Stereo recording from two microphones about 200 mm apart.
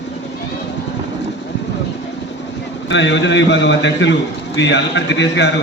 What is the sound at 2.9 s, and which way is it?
A man's voice, 65° left (ahead or behind).